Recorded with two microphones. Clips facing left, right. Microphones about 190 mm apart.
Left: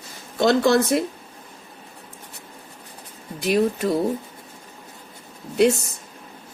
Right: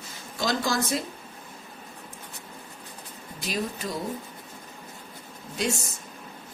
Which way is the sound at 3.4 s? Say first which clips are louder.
Left 11 dB; 65° left (ahead or behind).